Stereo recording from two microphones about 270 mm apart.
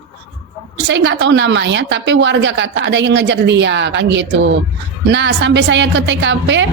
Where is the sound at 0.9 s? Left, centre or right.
Right.